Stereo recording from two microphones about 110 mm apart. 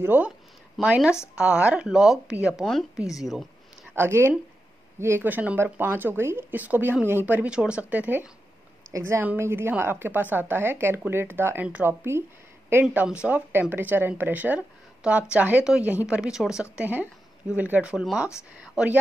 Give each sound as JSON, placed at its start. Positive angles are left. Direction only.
{"t": 0.0, "sound": "speech", "side_deg": -15}
{"t": 3.9, "sound": "speech", "side_deg": -20}
{"t": 8.9, "sound": "speech", "side_deg": -25}
{"t": 12.8, "sound": "speech", "side_deg": -10}